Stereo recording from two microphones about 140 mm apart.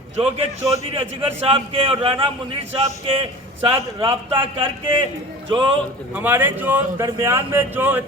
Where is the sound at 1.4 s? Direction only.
40° right (ahead or behind).